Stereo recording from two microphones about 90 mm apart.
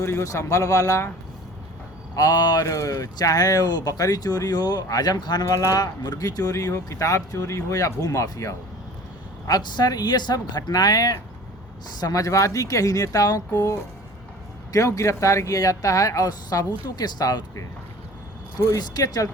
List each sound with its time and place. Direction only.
0.0 s speech: 30° left (ahead or behind)
2.1 s speech: 45° left (ahead or behind)
5.5 s speech: 35° left (ahead or behind)
9.5 s speech: 50° left (ahead or behind)
14.7 s speech: 40° left (ahead or behind)
18.8 s speech: 45° left (ahead or behind)